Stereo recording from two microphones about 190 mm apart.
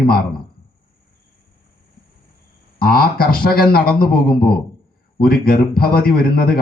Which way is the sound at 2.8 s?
50° left (ahead or behind).